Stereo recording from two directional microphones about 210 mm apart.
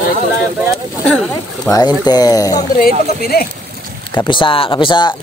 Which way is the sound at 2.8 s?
45° left (ahead or behind).